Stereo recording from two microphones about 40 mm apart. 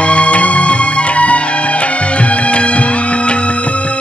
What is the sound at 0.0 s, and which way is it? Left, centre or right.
Music, left.